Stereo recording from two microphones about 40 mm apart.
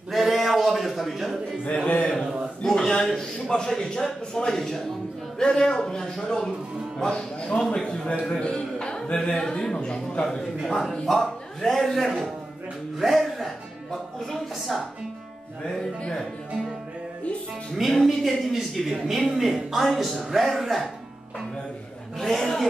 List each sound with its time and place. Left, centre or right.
0.1 s a sound: centre
1.7 s a man's voice: left
2.6 s a man's voice: centre
5.4 s a man's voice: left
10.7 s a man's voice: centre
15.6 s speech: centre
18.0 s a woman's voice: centre
22.2 s a man's voice: centre